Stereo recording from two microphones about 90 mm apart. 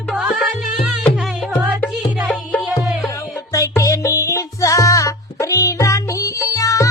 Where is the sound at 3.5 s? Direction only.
35° left (ahead or behind).